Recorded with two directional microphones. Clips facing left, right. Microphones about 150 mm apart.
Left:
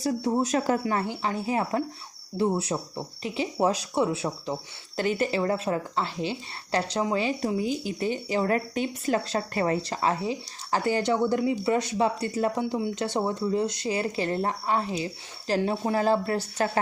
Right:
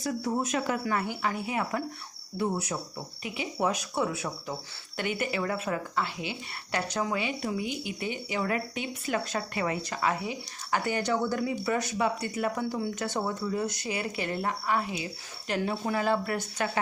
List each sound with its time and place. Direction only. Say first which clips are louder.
0.0 s speech: left 4 dB; 30° left (ahead or behind)